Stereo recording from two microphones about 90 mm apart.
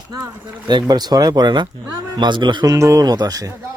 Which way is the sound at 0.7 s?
50° right (ahead or behind).